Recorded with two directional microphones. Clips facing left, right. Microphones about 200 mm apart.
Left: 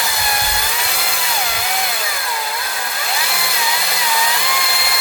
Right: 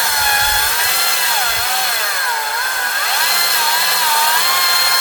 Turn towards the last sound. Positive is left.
turn(degrees=0)  # may be behind; listen again after turning